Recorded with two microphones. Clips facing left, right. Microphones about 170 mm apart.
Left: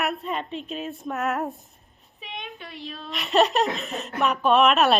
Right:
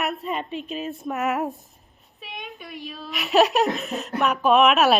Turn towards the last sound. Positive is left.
turn(degrees=-5)  # may be behind; listen again after turning